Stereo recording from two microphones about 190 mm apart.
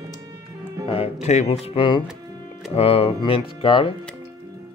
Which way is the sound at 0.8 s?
30° left (ahead or behind).